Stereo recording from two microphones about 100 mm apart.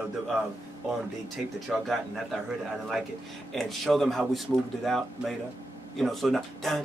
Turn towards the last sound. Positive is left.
turn(degrees=0)  # may be behind; listen again after turning